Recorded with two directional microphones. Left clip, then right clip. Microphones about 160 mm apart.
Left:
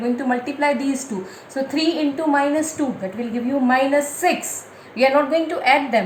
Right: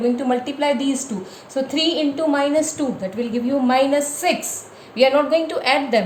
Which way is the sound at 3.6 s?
55° right (ahead or behind).